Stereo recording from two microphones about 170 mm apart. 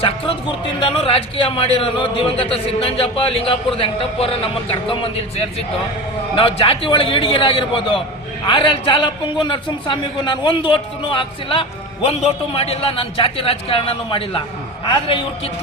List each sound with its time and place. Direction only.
0.8 s a man's voice: 35° left (ahead or behind)